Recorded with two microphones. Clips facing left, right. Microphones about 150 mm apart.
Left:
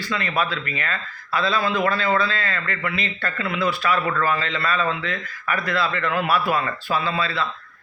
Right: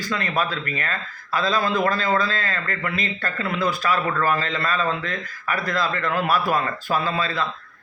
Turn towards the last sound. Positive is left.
turn(degrees=-40)  # may be behind; listen again after turning